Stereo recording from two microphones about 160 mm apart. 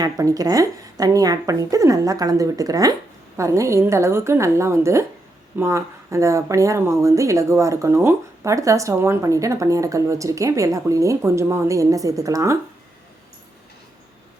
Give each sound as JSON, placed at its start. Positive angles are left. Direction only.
{"t": 0.0, "sound": "a woman's voice", "side_deg": -20}